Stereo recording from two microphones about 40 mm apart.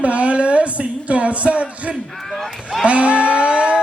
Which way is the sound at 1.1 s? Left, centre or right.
Right.